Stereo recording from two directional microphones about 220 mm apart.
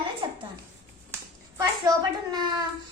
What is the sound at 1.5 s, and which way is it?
A child's voice, 20° right (ahead or behind).